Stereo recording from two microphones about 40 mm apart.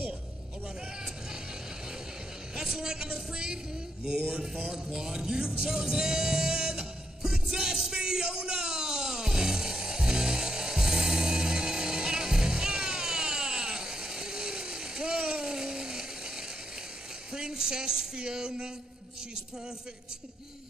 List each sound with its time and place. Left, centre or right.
2.5 s speech: centre
4.9 s music: centre
17.3 s a sound: centre